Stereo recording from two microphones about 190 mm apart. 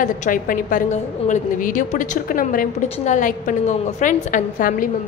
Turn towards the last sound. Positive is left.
turn(degrees=45)  # may be behind; listen again after turning